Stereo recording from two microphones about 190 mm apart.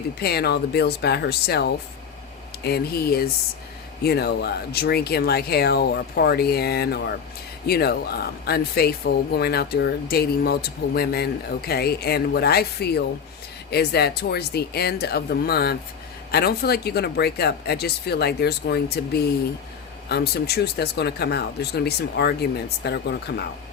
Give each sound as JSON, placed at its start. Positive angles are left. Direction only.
{"t": 0.2, "sound": "speech", "side_deg": 55}